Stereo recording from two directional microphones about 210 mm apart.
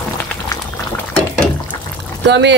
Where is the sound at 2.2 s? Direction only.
55° right (ahead or behind).